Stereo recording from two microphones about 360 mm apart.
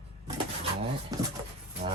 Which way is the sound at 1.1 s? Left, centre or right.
Centre.